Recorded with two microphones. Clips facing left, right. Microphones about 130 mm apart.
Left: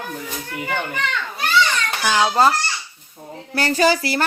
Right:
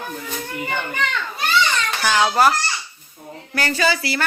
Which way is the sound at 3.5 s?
35° left (ahead or behind).